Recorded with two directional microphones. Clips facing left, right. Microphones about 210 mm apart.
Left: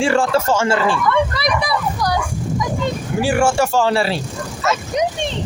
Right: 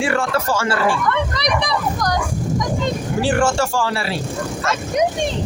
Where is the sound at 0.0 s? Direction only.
30° left (ahead or behind).